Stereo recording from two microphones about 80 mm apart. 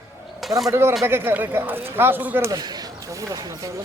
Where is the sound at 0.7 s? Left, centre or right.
Right.